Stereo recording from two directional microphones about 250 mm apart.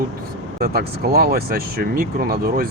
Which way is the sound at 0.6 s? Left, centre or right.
Right.